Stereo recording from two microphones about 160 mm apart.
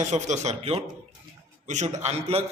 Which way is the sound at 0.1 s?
45° right (ahead or behind).